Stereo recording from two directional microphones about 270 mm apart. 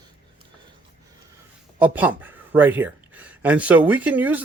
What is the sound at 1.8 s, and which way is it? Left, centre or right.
Speech, centre.